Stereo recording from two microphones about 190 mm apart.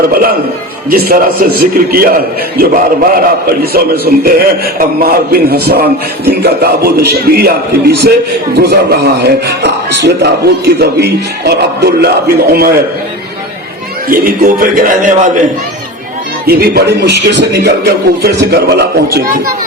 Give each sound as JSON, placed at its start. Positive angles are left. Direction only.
{"t": 0.9, "sound": "a man's voice", "side_deg": -50}
{"t": 14.1, "sound": "a man's voice", "side_deg": -50}
{"t": 16.5, "sound": "a man's voice", "side_deg": -55}